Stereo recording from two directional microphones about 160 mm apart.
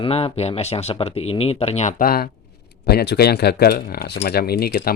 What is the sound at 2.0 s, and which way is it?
Speech, 65° left (ahead or behind).